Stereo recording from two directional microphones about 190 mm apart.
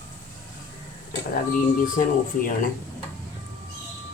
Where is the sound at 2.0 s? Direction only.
45° left (ahead or behind).